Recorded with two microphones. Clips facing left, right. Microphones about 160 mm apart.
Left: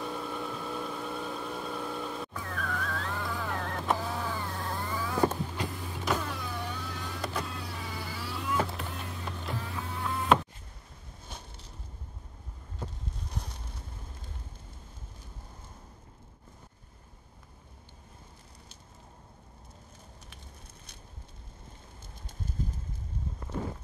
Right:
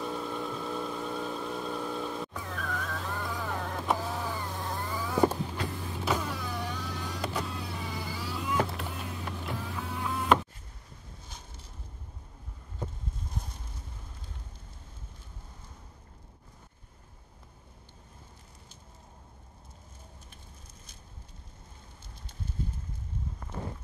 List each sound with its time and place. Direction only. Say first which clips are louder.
0.0 s vehicle: right 1 dB; centre (ahead or behind)
5.8 s power windows: right 1 dB; centre (ahead or behind)
13.4 s a sound: even; 75° left (ahead or behind)